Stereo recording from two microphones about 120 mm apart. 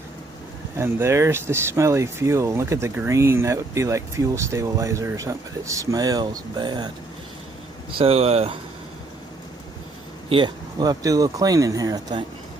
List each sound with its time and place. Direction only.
0.8 s speech: 20° right (ahead or behind); by 6.9 s 35° right (ahead or behind)
7.9 s speech: 55° right (ahead or behind)
10.2 s speech: 45° right (ahead or behind)